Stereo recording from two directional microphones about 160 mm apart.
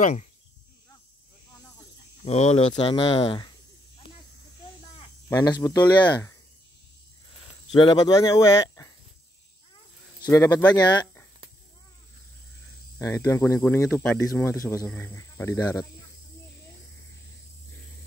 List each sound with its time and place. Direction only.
0.0 s speech: 45° left (ahead or behind)
2.2 s speech: 45° left (ahead or behind)
2.7 s speech: 30° left (ahead or behind)
4.9 s speech: 25° left (ahead or behind)
7.7 s speech: 30° left (ahead or behind)
10.2 s speech: 20° left (ahead or behind)
13.0 s speech: 20° left (ahead or behind)